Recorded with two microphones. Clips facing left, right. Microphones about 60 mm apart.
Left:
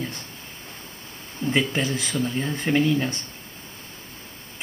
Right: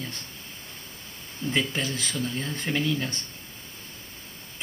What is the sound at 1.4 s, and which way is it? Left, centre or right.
Speech, left.